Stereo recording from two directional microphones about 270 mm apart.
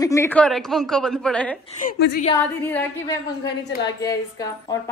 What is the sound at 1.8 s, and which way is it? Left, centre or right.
Speech, left.